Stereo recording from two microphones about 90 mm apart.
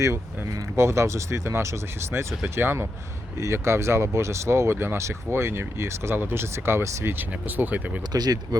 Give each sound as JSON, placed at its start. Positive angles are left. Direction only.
{"t": 0.8, "sound": "speech", "side_deg": -30}
{"t": 8.1, "sound": "speech", "side_deg": -50}